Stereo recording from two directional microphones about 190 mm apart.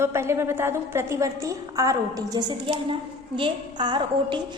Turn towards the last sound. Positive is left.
turn(degrees=-25)  # may be behind; listen again after turning